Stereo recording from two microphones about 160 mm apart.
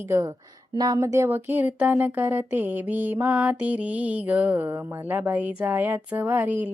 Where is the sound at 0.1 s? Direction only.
15° right (ahead or behind).